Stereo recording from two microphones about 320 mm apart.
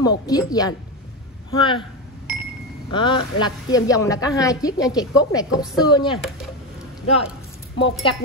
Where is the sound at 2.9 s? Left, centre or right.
Centre.